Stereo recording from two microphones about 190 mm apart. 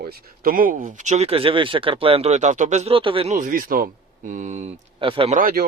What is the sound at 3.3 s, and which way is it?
Speech, 45° right (ahead or behind).